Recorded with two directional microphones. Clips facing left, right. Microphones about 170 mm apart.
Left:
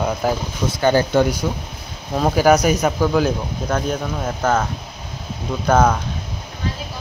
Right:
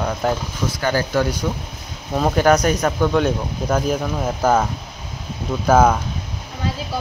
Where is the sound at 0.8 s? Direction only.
25° left (ahead or behind).